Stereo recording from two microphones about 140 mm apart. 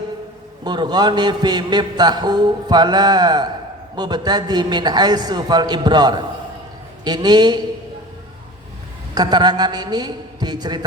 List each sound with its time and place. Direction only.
0.6 s a man's voice: 30° right (ahead or behind)
9.1 s a man's voice: 30° right (ahead or behind)